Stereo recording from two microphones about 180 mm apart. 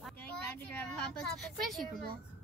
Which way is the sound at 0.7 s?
5° left (ahead or behind).